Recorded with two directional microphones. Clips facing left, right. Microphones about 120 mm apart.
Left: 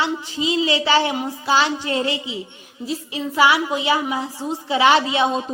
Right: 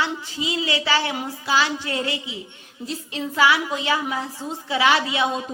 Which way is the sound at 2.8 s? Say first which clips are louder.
Left 3 dB; 10° left (ahead or behind).